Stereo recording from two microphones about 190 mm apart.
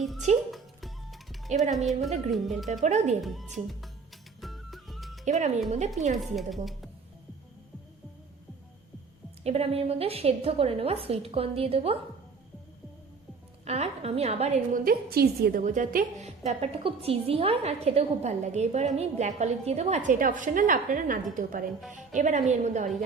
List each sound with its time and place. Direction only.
0.5 s music: centre (ahead or behind)
1.7 s speech: centre (ahead or behind)
2.8 s a woman's voice: 35° right (ahead or behind)
3.2 s speech: centre (ahead or behind)
4.4 s music: centre (ahead or behind)
5.2 s a woman's voice: 40° right (ahead or behind)
6.1 s speech: centre (ahead or behind)
9.4 s a woman's voice: 35° right (ahead or behind)
13.7 s a woman's voice: 35° right (ahead or behind)
14.8 s a woman's voice: 55° right (ahead or behind)
15.6 s a woman's voice: 40° right (ahead or behind)